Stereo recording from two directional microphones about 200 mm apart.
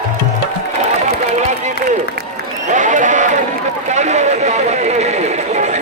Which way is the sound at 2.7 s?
40° right (ahead or behind).